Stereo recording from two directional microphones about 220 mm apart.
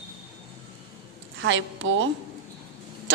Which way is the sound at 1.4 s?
60° right (ahead or behind).